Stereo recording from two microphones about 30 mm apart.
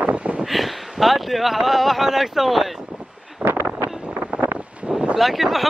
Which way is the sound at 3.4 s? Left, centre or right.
Right.